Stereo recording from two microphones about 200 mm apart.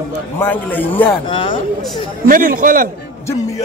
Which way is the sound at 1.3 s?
25° left (ahead or behind).